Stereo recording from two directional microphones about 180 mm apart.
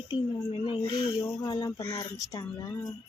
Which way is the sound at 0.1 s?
30° left (ahead or behind).